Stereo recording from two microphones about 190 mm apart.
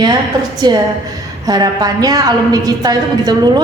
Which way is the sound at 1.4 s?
20° right (ahead or behind).